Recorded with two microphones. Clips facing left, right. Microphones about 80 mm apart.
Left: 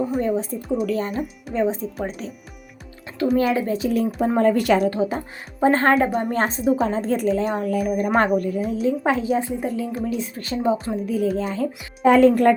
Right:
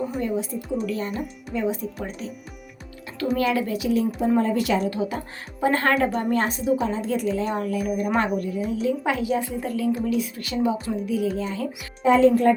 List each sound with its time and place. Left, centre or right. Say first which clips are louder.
0.2 s a woman's voice: left 3 dB; left
2.0 s a woman's voice: left 4 dB; left
3.3 s a woman's voice: left 2 dB; left
4.4 s a woman's voice: left 8 dB; left
4.9 s a woman's voice: left 4 dB; left
6.1 s a woman's voice: left 2 dB; centre
6.3 s a woman's voice: left 2 dB; left
10.1 s a woman's voice: right 1 dB; left
12.0 s speech: left 3 dB; left